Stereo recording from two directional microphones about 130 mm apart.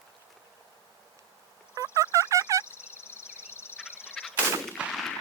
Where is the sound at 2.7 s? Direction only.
20° left (ahead or behind).